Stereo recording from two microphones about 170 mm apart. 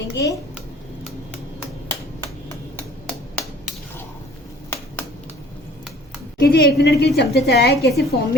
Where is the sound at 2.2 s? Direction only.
20° left (ahead or behind).